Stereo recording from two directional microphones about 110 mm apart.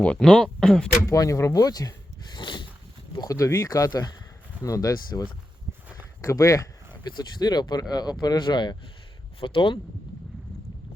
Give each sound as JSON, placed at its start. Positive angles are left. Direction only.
{"t": 0.0, "sound": "speech", "side_deg": 10}
{"t": 1.0, "sound": "speech", "side_deg": 30}
{"t": 3.2, "sound": "speech", "side_deg": 30}
{"t": 6.9, "sound": "speech", "side_deg": 40}